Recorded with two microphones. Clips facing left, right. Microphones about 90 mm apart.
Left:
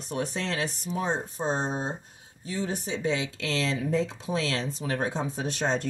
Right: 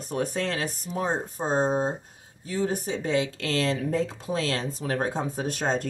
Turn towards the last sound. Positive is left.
turn(degrees=-45)  # may be behind; listen again after turning